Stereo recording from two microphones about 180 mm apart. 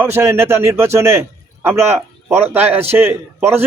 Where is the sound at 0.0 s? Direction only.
15° right (ahead or behind).